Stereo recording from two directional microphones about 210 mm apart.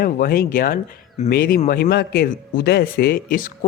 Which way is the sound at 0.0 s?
45° left (ahead or behind).